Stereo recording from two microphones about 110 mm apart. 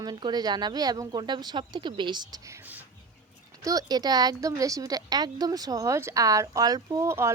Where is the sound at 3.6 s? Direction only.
35° right (ahead or behind).